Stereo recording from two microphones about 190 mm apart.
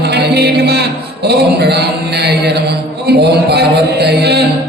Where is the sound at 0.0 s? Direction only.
60° right (ahead or behind).